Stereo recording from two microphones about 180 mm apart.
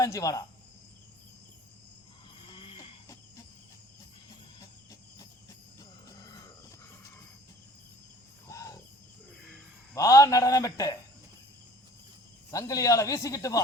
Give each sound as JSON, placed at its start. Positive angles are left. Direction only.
{"t": 0.0, "sound": "a man's voice", "side_deg": 20}
{"t": 2.5, "sound": "a sound", "side_deg": 25}
{"t": 4.9, "sound": "cricket", "side_deg": 20}
{"t": 6.1, "sound": "wild animals", "side_deg": 20}
{"t": 8.4, "sound": "cricket", "side_deg": 15}
{"t": 9.9, "sound": "a man's voice", "side_deg": 20}
{"t": 12.5, "sound": "a man's voice", "side_deg": 20}